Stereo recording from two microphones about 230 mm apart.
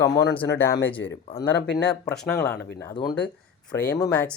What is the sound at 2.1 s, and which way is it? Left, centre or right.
Speech, centre.